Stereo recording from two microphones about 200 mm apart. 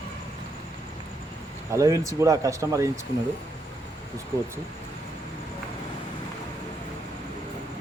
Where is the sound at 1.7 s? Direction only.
15° right (ahead or behind).